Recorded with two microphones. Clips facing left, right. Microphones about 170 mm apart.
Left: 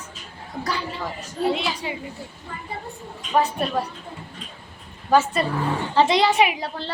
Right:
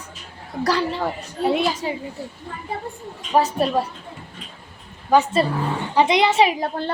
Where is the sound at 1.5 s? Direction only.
45° right (ahead or behind).